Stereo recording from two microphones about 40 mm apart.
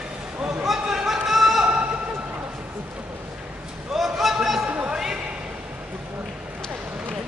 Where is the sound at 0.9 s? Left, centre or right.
Centre.